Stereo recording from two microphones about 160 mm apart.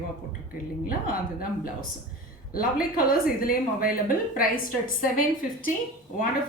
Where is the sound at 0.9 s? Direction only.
65° left (ahead or behind).